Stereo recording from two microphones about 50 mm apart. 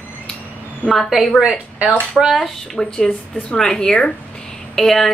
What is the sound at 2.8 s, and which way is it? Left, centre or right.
A woman's voice, centre.